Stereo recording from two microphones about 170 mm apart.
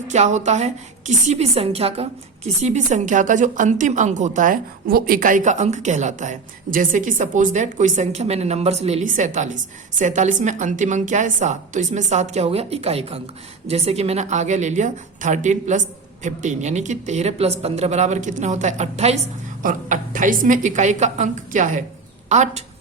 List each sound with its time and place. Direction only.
0.1 s a woman's voice: 45° right (ahead or behind)
19.6 s a woman's voice: 50° right (ahead or behind)